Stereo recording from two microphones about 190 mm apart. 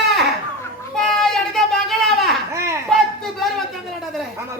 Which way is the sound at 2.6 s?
15° right (ahead or behind).